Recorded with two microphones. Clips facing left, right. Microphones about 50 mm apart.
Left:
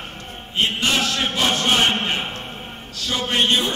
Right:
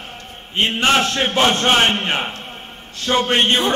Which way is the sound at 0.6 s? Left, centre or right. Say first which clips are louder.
Right 4 dB; right.